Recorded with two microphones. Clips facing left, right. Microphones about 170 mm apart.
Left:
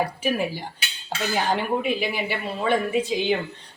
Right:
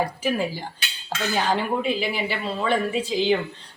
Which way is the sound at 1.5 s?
20° left (ahead or behind).